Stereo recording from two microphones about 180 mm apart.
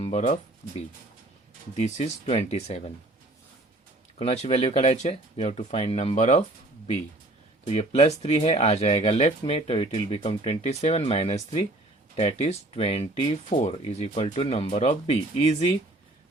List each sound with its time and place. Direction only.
0.0 s speech: 40° left (ahead or behind)
1.7 s speech: 40° left (ahead or behind)
4.2 s speech: 35° left (ahead or behind)
7.6 s speech: 35° left (ahead or behind)